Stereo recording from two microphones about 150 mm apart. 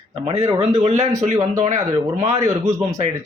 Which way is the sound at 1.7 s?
20° right (ahead or behind).